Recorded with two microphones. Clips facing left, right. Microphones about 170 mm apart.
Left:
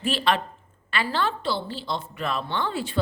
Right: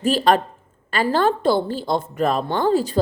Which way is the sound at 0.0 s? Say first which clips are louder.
Right 7 dB; 40° right (ahead or behind).